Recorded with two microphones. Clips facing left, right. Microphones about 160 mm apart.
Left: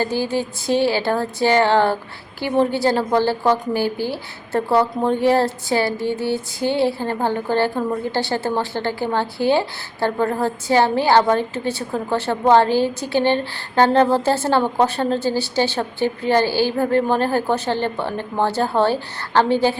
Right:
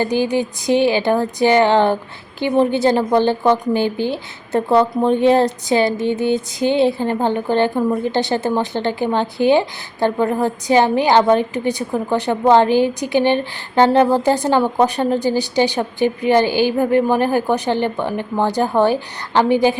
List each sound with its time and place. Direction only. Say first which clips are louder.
0.0 s a woman's voice: right 4 dB; 15° right (ahead or behind)